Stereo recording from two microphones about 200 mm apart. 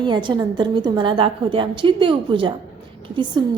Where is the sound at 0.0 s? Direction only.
25° right (ahead or behind).